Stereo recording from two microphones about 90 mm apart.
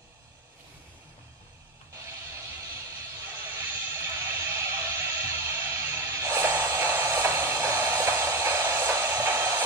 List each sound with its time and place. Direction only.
2.0 s vehicle: 30° right (ahead or behind)